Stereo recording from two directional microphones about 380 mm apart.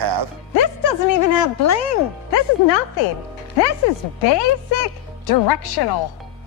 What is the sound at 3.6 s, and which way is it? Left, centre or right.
Speech, left.